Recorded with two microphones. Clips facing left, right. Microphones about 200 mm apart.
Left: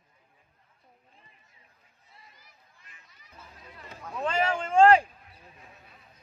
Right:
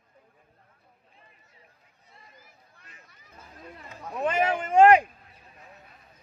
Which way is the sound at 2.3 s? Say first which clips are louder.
Right 5 dB; 55° right (ahead or behind).